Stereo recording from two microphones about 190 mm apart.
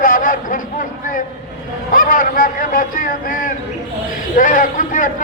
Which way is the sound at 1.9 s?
45° left (ahead or behind).